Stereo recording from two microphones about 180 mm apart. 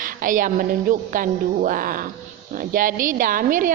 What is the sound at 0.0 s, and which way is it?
A woman's voice, 50° right (ahead or behind).